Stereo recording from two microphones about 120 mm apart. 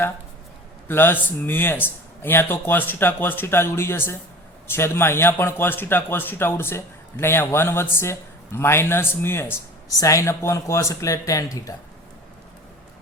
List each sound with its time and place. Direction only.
0.9 s a man's voice: 20° left (ahead or behind)